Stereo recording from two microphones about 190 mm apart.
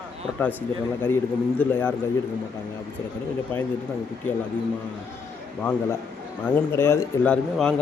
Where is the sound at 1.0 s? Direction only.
10° left (ahead or behind).